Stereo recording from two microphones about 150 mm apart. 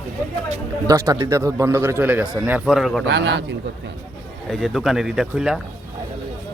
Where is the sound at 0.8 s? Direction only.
20° right (ahead or behind); by 3.1 s centre (ahead or behind).